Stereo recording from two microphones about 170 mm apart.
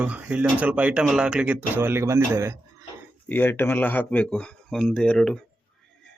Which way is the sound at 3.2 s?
10° left (ahead or behind).